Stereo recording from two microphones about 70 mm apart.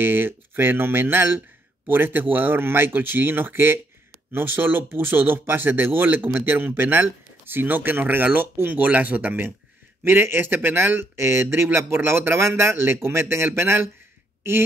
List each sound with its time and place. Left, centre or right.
0.0 s speech: right